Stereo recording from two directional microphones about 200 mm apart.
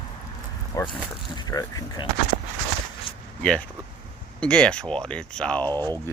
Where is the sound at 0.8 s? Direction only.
15° left (ahead or behind).